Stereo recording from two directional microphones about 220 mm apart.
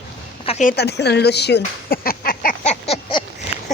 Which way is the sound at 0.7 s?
50° left (ahead or behind).